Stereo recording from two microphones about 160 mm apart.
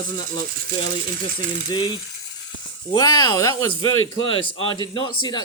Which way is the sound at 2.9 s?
25° left (ahead or behind).